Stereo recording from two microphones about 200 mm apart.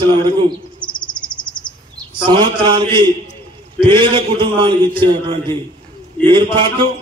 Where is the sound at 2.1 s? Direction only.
25° right (ahead or behind).